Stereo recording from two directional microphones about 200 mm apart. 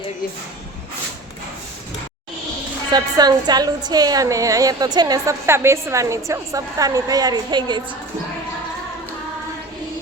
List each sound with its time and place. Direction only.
2.9 s a woman's voice: 20° right (ahead or behind)